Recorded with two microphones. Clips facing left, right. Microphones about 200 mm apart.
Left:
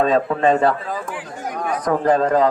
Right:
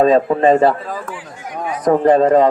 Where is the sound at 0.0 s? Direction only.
30° right (ahead or behind).